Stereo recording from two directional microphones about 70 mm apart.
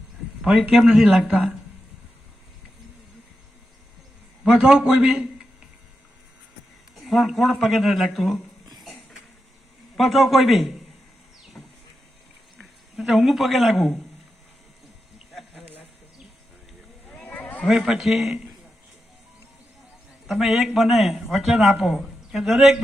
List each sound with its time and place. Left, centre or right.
0.9 s speech: centre
4.4 s a man's voice: centre
6.9 s a man's voice: centre
9.9 s a man's voice: centre
11.6 s power windows: left
12.5 s a man's voice: centre
15.3 s a sound: centre
17.2 s a sound: left
17.7 s a man's voice: centre
20.2 s a man's voice: centre